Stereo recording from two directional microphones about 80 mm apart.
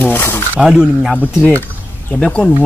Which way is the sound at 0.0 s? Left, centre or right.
Left.